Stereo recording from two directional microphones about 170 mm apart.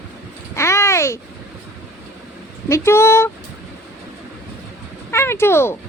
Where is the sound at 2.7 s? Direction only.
15° left (ahead or behind).